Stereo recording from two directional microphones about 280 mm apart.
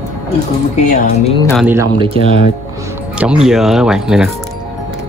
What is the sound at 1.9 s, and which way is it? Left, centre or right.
Speech, centre.